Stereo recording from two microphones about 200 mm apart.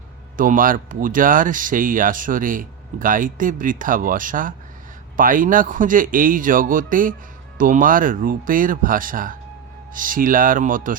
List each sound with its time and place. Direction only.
0.3 s speech: 40° right (ahead or behind)